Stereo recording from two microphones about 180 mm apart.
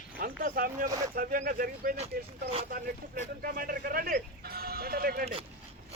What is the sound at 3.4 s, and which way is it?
Music, 50° right (ahead or behind).